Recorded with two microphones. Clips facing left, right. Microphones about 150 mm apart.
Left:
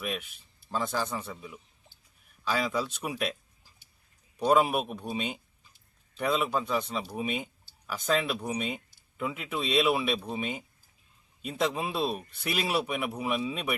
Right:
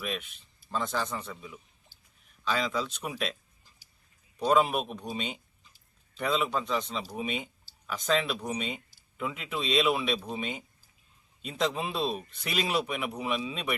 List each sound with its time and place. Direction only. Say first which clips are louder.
0.0 s a man's voice: left 1 dB; 5° left (ahead or behind)